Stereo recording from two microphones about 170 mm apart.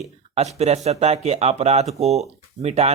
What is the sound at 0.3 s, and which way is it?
Speech, 40° right (ahead or behind).